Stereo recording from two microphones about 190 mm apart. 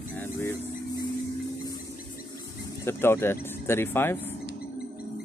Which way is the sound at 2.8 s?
10° left (ahead or behind).